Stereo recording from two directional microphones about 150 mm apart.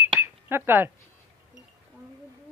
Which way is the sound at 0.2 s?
15° right (ahead or behind).